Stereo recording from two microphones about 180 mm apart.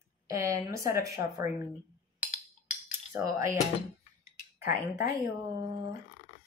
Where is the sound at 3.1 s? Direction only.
15° right (ahead or behind).